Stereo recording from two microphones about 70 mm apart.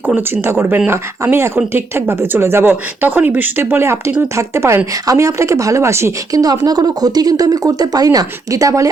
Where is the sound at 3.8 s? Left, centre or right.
Right.